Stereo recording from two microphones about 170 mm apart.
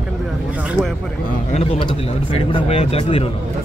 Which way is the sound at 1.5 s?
35° left (ahead or behind).